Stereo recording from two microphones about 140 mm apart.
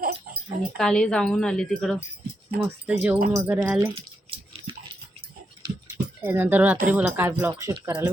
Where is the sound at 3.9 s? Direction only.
40° right (ahead or behind).